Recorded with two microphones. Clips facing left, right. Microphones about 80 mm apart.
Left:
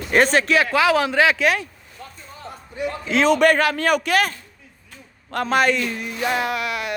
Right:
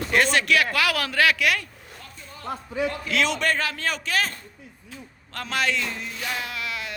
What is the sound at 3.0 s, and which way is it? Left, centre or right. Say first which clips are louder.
Speech: left 8 dB; left.